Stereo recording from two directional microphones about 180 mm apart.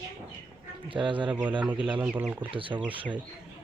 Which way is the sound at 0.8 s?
30° right (ahead or behind).